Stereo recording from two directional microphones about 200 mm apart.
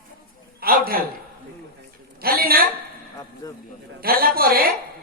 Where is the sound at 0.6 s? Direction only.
50° right (ahead or behind).